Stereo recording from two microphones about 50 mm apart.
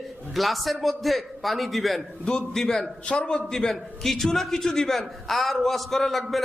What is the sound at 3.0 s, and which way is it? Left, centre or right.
A man's voice, centre.